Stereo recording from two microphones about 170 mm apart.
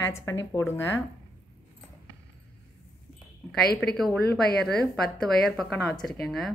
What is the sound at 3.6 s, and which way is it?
Speech, 65° left (ahead or behind).